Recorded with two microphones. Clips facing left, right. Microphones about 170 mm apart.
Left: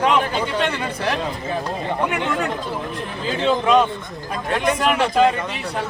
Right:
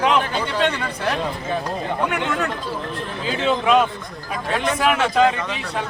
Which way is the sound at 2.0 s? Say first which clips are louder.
Left 1 dB; 10° left (ahead or behind).